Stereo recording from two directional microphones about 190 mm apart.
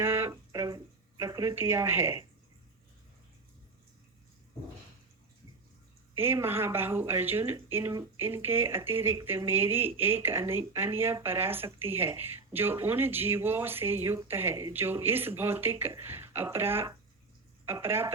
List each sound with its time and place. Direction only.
0.0 s a sound: 15° right (ahead or behind)
1.2 s speech: 20° right (ahead or behind)
6.1 s speech: 10° right (ahead or behind)